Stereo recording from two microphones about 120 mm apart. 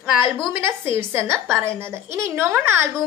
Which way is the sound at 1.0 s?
20° right (ahead or behind).